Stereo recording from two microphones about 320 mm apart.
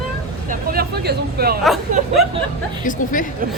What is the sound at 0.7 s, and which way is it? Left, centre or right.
Speech, right.